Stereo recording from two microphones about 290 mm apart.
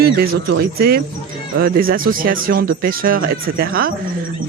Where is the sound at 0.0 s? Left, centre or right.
Right.